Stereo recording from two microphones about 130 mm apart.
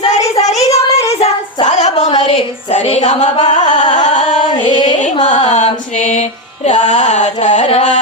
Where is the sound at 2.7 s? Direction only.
60° left (ahead or behind).